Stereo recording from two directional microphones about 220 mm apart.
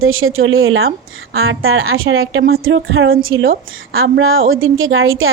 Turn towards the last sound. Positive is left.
turn(degrees=-65)  # may be behind; listen again after turning